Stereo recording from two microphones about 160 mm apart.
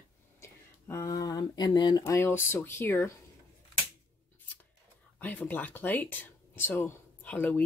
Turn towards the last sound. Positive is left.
turn(degrees=10)  # may be behind; listen again after turning